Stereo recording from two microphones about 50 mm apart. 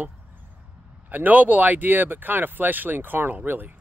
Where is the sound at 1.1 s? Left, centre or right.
Right.